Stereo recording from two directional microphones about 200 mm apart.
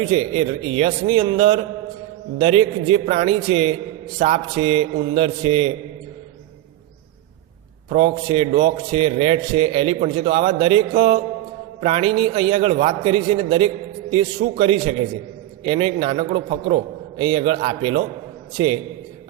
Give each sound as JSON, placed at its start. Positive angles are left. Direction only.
{"t": 0.0, "sound": "a man's voice", "side_deg": -25}
{"t": 7.9, "sound": "a man's voice", "side_deg": -25}